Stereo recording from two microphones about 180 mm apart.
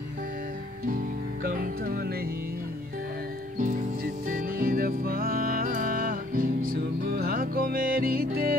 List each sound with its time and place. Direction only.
0.8 s music: 50° right (ahead or behind)
3.5 s music: 50° right (ahead or behind)